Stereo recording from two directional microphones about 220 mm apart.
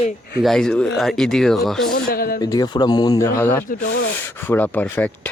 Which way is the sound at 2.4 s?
15° left (ahead or behind).